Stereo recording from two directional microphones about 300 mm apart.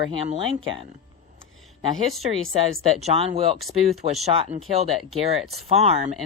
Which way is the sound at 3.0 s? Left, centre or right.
Centre.